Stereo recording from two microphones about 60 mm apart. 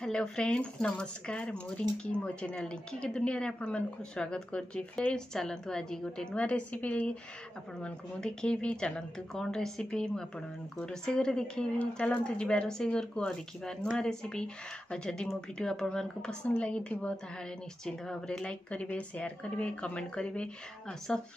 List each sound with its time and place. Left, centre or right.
0.0 s speech: centre
6.3 s a woman's voice: left